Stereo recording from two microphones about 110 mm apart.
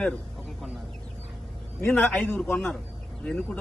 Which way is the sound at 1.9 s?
15° left (ahead or behind).